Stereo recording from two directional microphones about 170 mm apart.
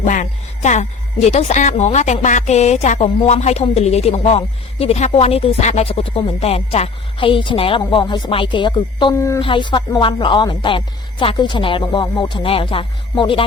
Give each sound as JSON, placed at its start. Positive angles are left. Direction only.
{"t": 0.0, "sound": "music", "side_deg": 50}
{"t": 1.3, "sound": "a woman's voice", "side_deg": 40}
{"t": 9.4, "sound": "a woman's voice", "side_deg": 30}